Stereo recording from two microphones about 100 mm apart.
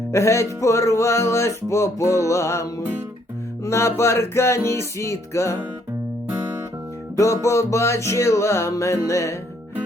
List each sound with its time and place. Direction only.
0.1 s music: 30° left (ahead or behind)
7.4 s music: 30° left (ahead or behind)